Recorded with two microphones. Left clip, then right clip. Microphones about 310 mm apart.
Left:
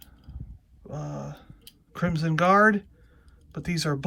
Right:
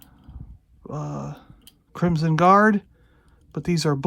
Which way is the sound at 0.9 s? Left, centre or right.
Centre.